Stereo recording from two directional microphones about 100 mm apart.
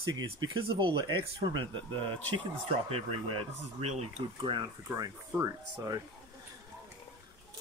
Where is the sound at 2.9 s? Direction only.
85° right.